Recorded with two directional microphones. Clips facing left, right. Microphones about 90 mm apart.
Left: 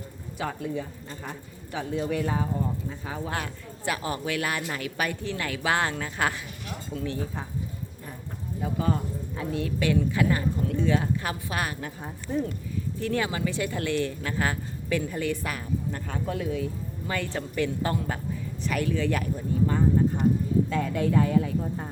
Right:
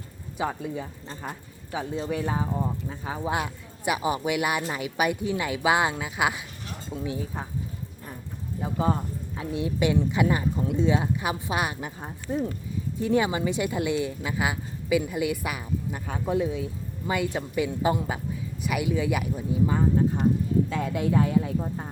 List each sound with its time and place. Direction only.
0.3 s a woman's voice: 15° right (ahead or behind)
8.6 s a woman's voice: 25° right (ahead or behind)